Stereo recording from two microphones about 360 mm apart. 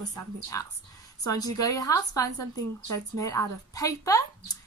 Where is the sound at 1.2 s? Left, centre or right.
Centre.